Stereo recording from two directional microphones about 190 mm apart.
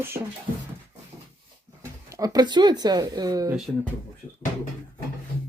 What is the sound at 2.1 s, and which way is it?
Speech, 20° right (ahead or behind).